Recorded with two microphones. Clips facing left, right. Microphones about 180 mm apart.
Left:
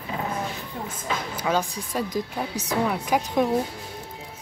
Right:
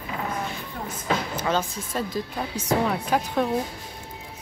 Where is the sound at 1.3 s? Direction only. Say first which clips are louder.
Even; 10° left (ahead or behind).